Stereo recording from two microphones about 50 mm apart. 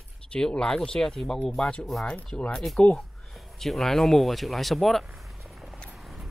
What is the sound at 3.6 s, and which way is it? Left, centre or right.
Speech, centre.